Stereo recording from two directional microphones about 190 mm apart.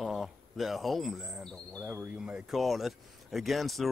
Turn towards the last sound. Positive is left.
turn(degrees=0)  # may be behind; listen again after turning